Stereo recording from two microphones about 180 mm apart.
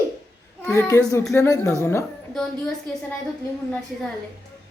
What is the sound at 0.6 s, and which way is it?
Speech, 15° left (ahead or behind).